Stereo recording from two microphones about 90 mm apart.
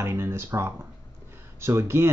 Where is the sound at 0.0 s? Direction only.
30° right (ahead or behind).